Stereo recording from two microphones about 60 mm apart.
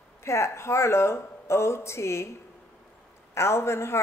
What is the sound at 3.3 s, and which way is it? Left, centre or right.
Speech, left.